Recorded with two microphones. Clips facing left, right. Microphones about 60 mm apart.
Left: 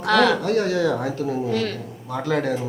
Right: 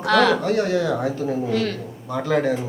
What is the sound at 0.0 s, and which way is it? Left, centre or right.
Speech, centre.